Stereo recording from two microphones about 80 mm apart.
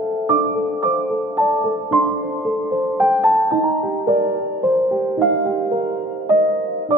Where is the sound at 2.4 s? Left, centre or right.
Centre.